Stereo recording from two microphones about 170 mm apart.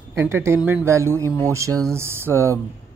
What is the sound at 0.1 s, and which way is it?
Speech, 15° right (ahead or behind).